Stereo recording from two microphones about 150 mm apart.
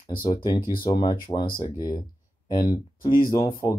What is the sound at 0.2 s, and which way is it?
Speech, 30° left (ahead or behind).